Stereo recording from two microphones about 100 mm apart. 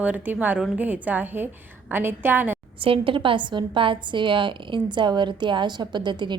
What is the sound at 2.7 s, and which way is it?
A woman's voice, 65° right (ahead or behind).